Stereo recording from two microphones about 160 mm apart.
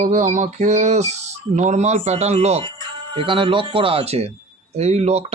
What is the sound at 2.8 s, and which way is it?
Speech, 30° right (ahead or behind).